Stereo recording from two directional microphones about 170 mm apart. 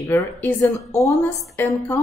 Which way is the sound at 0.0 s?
15° left (ahead or behind).